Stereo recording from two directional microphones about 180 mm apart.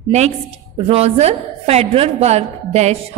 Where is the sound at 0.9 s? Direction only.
35° right (ahead or behind).